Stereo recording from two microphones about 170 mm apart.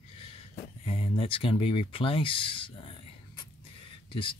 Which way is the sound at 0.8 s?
35° left (ahead or behind).